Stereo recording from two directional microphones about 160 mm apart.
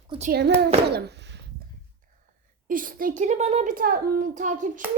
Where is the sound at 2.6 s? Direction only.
60° right (ahead or behind).